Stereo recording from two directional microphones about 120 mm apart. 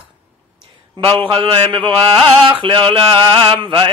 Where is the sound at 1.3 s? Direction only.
40° right (ahead or behind).